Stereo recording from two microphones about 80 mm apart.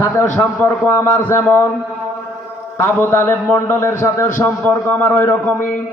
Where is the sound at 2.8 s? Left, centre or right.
Left.